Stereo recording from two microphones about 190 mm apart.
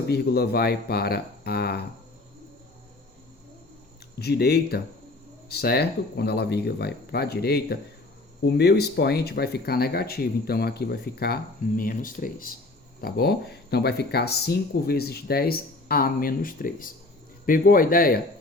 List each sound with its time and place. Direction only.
0.1 s speech: 60° left (ahead or behind)
4.2 s speech: 60° left (ahead or behind)